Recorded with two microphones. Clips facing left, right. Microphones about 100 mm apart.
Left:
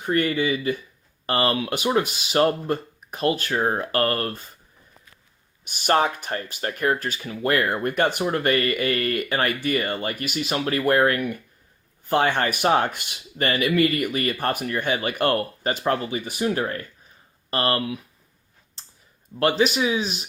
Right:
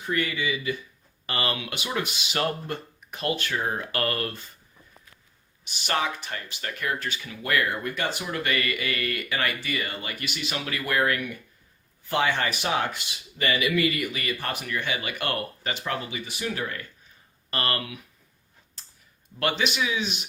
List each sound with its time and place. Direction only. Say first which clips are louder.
0.0 s speech: left 6 dB; 50° left (ahead or behind)
5.6 s speech: left 7 dB; 50° left (ahead or behind); by 17.9 s 30° left (ahead or behind)
19.4 s speech: left 6 dB; 35° left (ahead or behind)